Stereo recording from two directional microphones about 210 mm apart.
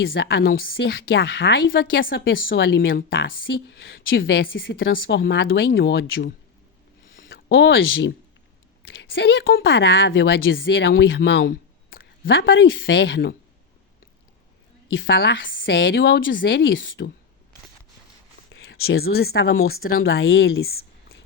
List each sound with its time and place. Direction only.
0.0 s a woman's voice: 60° left (ahead or behind)
2.4 s a woman's voice: 60° left (ahead or behind)
5.2 s speech: 55° left (ahead or behind)
7.3 s a sound: 45° left (ahead or behind)
7.5 s a woman's voice: 60° left (ahead or behind)
14.9 s a woman's voice: 60° left (ahead or behind)
18.9 s speech: 50° left (ahead or behind); by 20.7 s 70° left (ahead or behind)